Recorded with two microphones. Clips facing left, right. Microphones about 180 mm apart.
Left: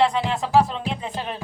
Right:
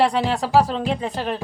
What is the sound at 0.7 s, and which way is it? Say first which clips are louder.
Speech: right 5 dB; 45° right (ahead or behind).